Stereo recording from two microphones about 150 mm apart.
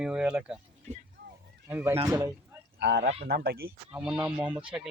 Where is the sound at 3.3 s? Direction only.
90° right.